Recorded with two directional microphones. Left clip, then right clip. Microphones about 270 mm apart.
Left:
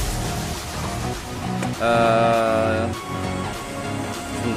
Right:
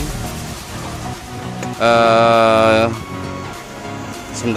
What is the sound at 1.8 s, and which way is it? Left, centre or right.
Speech, centre.